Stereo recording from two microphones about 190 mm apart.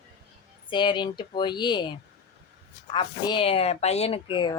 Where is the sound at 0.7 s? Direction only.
25° left (ahead or behind).